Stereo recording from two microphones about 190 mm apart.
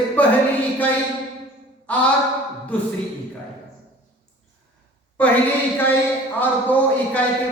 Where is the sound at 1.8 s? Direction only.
5° left (ahead or behind).